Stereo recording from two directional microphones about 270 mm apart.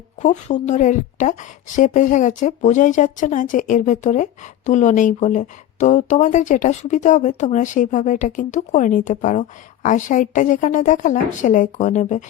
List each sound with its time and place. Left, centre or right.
0.2 s a woman's voice: left